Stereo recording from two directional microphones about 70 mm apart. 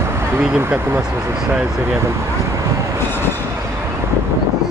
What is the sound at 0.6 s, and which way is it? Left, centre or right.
Speech, right.